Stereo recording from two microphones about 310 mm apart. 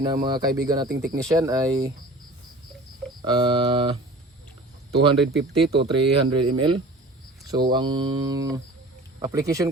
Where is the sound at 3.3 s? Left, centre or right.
Centre.